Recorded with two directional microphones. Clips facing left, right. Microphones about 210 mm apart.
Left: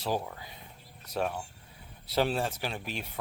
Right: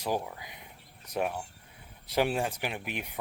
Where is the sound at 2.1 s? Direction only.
15° right (ahead or behind).